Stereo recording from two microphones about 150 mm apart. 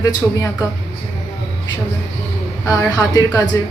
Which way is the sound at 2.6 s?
25° left (ahead or behind).